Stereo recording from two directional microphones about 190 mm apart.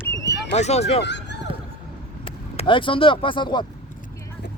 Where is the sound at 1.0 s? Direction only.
65° left (ahead or behind).